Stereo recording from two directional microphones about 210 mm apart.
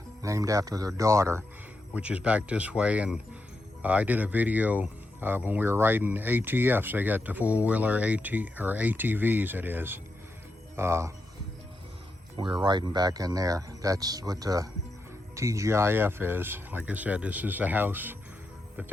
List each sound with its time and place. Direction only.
0.2 s speech: 15° right (ahead or behind)
12.6 s speech: 20° right (ahead or behind)